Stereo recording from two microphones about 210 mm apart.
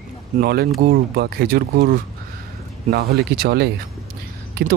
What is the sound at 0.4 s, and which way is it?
Speech, 50° right (ahead or behind).